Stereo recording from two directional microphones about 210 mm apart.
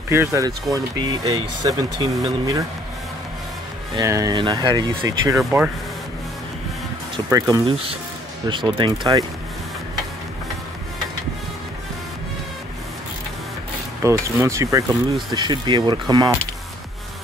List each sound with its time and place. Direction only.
0.1 s speech: 15° right (ahead or behind)
3.9 s speech: 15° right (ahead or behind)
5.4 s speech: 5° right (ahead or behind)
7.2 s speech: 15° right (ahead or behind)
14.0 s speech: 15° right (ahead or behind)